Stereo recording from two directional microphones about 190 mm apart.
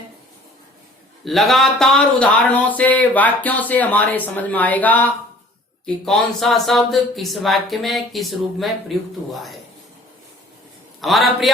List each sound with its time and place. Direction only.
1.2 s speech: centre (ahead or behind)
11.0 s speech: centre (ahead or behind)